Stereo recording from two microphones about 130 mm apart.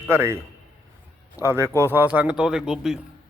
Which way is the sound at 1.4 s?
20° right (ahead or behind).